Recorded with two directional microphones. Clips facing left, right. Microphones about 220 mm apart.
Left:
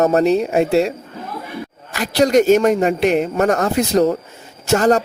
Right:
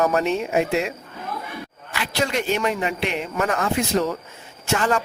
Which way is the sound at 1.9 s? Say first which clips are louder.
Left 10 dB; 40° left (ahead or behind).